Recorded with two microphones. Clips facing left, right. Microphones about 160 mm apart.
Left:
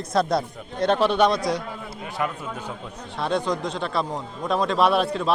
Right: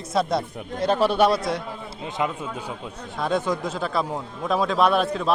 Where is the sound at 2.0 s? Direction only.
20° right (ahead or behind).